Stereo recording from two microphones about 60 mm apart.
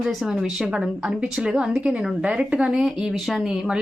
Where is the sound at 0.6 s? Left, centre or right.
Centre.